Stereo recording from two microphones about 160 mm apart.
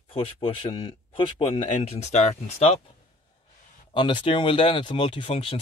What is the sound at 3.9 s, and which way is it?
Speech, 30° left (ahead or behind).